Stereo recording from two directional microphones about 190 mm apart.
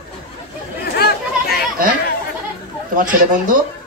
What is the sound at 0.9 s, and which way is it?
Chatter, 55° left (ahead or behind).